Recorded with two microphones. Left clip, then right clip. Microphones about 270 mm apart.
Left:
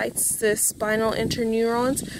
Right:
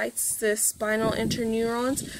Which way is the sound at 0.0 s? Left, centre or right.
Left.